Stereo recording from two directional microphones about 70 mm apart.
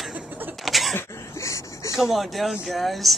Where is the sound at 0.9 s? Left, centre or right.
Left.